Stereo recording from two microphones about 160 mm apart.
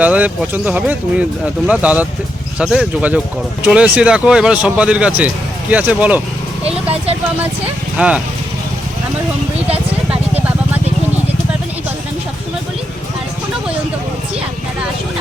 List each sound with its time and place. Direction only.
0.0 s speech: 10° right (ahead or behind)
6.7 s vehicle: 40° right (ahead or behind)
7.9 s speech: 10° right (ahead or behind)